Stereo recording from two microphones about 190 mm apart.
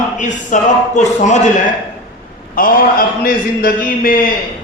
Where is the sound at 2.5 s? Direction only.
50° left (ahead or behind).